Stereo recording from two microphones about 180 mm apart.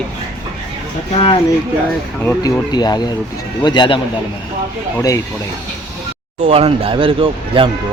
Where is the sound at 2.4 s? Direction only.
20° left (ahead or behind).